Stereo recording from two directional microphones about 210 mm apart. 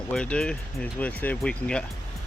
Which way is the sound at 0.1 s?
5° left (ahead or behind).